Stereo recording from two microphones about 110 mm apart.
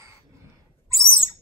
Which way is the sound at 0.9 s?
30° right (ahead or behind).